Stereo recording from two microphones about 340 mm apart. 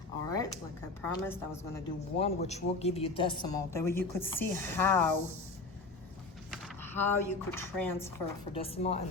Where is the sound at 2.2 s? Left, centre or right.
Centre.